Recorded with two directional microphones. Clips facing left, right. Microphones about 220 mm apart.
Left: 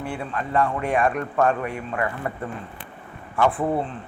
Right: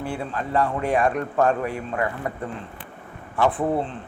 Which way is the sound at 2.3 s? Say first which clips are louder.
Even; 15° right (ahead or behind).